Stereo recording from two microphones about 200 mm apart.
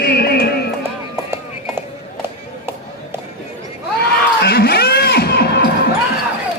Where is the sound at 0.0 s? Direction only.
55° left (ahead or behind).